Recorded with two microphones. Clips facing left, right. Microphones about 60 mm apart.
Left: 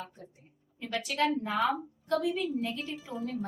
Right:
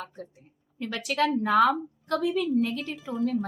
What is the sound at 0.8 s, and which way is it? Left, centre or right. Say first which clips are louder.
A woman's voice: right 3 dB; right.